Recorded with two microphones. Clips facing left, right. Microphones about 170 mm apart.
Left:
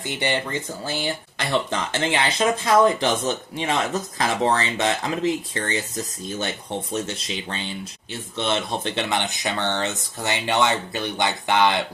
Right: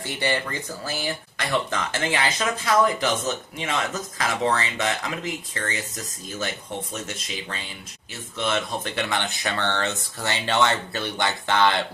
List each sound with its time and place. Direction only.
0.0 s speech: 20° left (ahead or behind)